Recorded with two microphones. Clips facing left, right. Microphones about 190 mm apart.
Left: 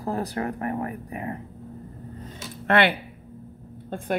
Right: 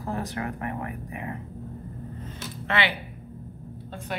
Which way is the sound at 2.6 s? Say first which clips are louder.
Left 7 dB; 55° left (ahead or behind).